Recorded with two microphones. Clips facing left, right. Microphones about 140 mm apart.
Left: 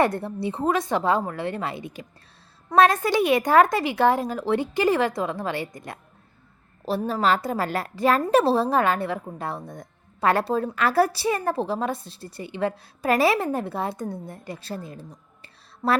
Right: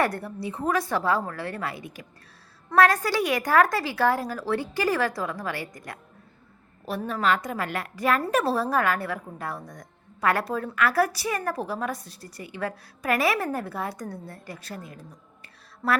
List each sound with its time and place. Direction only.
0.0 s a woman's voice: 25° left (ahead or behind)
15.8 s speech: 15° left (ahead or behind)